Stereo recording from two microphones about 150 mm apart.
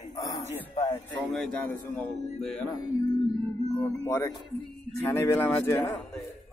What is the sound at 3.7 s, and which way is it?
Speech, 15° left (ahead or behind).